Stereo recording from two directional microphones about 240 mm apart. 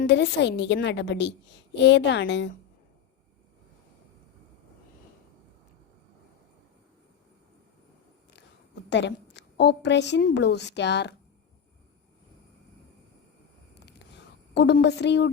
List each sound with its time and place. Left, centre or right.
0.0 s a woman's voice: left
8.9 s a woman's voice: left
14.5 s a woman's voice: left